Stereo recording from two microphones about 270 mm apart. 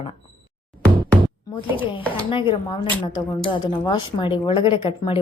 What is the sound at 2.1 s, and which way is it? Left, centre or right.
A woman's voice, centre.